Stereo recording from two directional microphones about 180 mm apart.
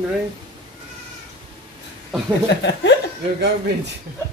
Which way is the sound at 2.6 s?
75° left (ahead or behind).